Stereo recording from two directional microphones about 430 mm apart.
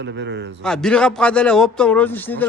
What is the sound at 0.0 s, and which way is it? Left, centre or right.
Speech, right.